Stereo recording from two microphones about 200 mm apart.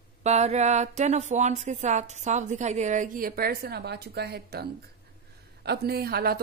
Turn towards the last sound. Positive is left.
turn(degrees=-50)  # may be behind; listen again after turning